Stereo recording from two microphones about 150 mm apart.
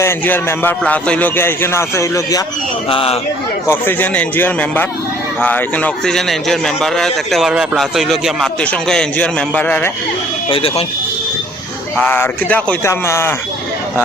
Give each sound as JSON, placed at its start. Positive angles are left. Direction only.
{"t": 0.0, "sound": "speech", "side_deg": 15}
{"t": 2.9, "sound": "speech", "side_deg": 40}
{"t": 3.7, "sound": "a man's voice", "side_deg": 15}
{"t": 10.5, "sound": "speech", "side_deg": 40}
{"t": 11.9, "sound": "speech", "side_deg": 15}